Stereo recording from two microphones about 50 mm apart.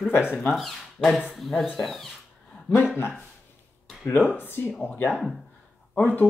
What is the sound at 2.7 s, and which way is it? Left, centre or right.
Speech, left.